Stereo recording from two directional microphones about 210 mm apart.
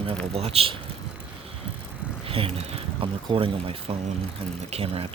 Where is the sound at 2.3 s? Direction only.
25° right (ahead or behind).